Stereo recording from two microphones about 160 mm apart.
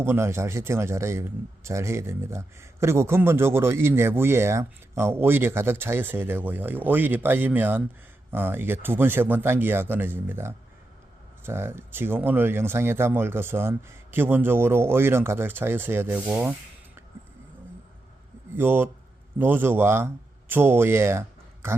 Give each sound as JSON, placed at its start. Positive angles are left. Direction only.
{"t": 0.0, "sound": "a man's voice", "side_deg": -15}
{"t": 18.5, "sound": "a man's voice", "side_deg": -15}